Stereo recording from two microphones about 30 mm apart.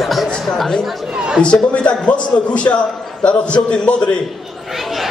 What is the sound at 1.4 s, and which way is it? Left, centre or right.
A man's voice, left.